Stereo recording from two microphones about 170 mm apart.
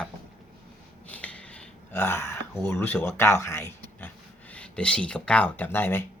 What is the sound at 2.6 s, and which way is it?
Speech, 10° left (ahead or behind).